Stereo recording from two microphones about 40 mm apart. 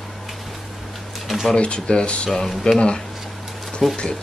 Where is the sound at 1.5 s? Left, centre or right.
Left.